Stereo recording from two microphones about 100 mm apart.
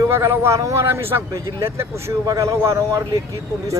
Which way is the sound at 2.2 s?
35° right (ahead or behind).